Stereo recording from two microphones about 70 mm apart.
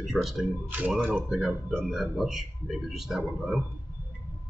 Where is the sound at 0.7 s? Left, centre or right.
Centre.